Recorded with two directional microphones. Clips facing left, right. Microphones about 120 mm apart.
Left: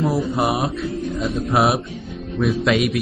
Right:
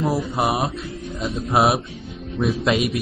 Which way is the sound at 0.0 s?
Centre (ahead or behind).